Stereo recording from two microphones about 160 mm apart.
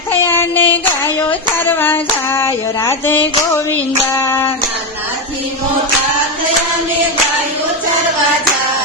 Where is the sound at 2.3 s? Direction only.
15° left (ahead or behind).